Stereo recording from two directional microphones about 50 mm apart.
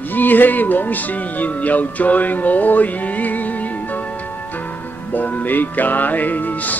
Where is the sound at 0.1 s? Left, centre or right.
Left.